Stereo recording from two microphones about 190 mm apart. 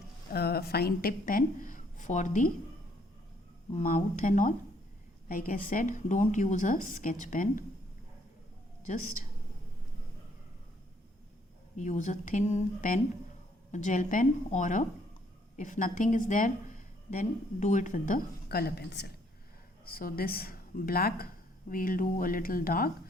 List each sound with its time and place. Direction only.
0.3 s a woman's voice: 55° left (ahead or behind)
3.7 s a woman's voice: 40° left (ahead or behind)
11.8 s a woman's voice: 40° left (ahead or behind)